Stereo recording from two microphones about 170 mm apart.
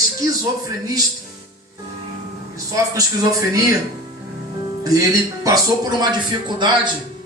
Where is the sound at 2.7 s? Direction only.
20° right (ahead or behind).